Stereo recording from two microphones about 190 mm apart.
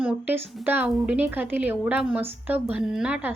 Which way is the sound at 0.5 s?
10° right (ahead or behind).